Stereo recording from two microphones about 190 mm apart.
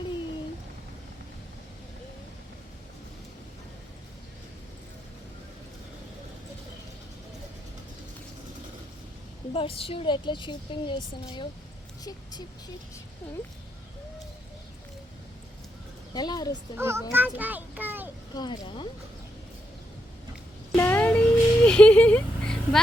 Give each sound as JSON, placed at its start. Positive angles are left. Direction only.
{"t": 9.5, "sound": "a woman's voice", "side_deg": 30}
{"t": 16.1, "sound": "a woman's voice", "side_deg": 20}
{"t": 16.7, "sound": "a child's voice", "side_deg": -15}
{"t": 18.3, "sound": "a woman's voice", "side_deg": 25}
{"t": 20.7, "sound": "cat", "side_deg": 10}